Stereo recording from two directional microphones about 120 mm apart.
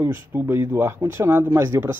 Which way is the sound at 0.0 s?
20° right (ahead or behind).